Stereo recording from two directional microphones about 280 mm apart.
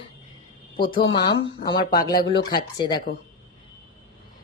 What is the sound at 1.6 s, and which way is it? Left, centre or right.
Speech, centre.